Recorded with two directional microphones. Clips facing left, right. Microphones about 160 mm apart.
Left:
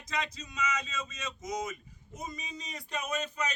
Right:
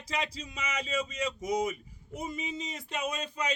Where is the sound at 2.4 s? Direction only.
25° right (ahead or behind).